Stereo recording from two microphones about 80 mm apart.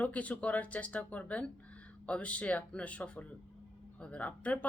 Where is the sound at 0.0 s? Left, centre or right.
Centre.